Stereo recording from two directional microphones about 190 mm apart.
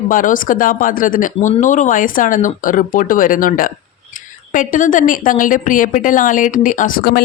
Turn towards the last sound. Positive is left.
turn(degrees=50)  # may be behind; listen again after turning